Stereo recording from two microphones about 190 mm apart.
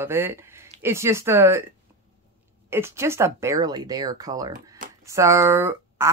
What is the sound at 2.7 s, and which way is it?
Speech, 15° right (ahead or behind).